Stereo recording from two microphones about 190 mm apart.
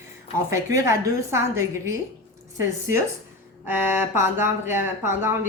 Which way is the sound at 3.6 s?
10° right (ahead or behind).